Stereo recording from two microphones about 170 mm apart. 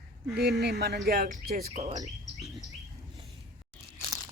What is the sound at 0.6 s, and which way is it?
Speech, 75° right (ahead or behind).